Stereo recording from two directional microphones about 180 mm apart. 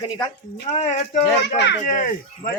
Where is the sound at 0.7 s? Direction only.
35° left (ahead or behind).